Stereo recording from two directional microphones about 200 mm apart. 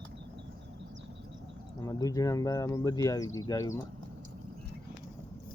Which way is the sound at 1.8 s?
15° left (ahead or behind).